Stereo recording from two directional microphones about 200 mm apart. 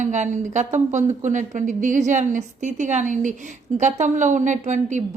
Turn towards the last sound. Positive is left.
turn(degrees=-35)  # may be behind; listen again after turning